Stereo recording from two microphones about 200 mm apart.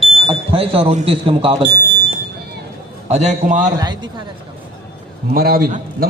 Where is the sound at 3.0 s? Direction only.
35° right (ahead or behind).